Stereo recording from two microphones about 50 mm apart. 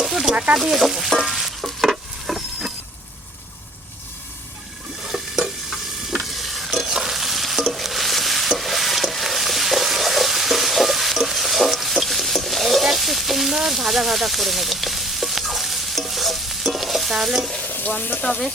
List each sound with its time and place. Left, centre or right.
0.0 s a sound: centre
0.6 s frying: centre
1.2 s stir: centre
5.0 s stir: centre
17.6 s frying: left